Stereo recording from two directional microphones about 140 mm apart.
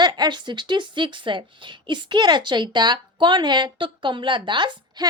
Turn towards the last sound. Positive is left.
turn(degrees=-35)  # may be behind; listen again after turning